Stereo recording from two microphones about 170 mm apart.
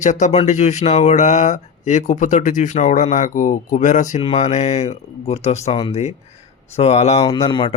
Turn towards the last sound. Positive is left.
turn(degrees=30)  # may be behind; listen again after turning